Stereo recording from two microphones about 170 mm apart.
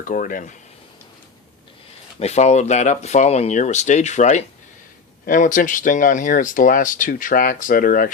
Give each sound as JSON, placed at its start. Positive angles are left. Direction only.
{"t": 0.0, "sound": "speech", "side_deg": 55}
{"t": 2.1, "sound": "speech", "side_deg": 40}